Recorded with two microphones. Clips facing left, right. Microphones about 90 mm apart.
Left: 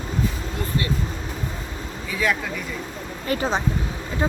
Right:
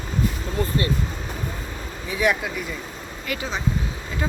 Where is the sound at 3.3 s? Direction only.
35° left (ahead or behind).